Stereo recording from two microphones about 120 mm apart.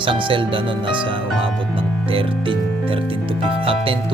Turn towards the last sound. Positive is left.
turn(degrees=-50)  # may be behind; listen again after turning